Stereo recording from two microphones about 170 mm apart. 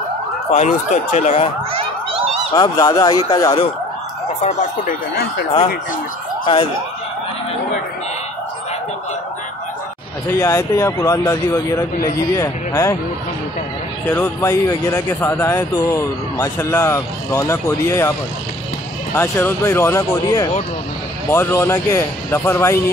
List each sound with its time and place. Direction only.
0.5 s speech: 45° left (ahead or behind)
1.7 s a sound: 35° right (ahead or behind)
2.5 s speech: 25° left (ahead or behind)
4.4 s speech: 45° left (ahead or behind)
6.4 s speech: 30° left (ahead or behind)
10.4 s speech: 20° left (ahead or behind)
14.1 s speech: 15° left (ahead or behind)
19.1 s speech: 15° left (ahead or behind)